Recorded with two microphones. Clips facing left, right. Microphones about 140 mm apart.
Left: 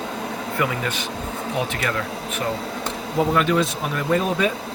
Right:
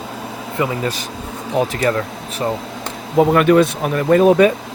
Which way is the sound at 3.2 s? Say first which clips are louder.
Right 8 dB; 60° right (ahead or behind).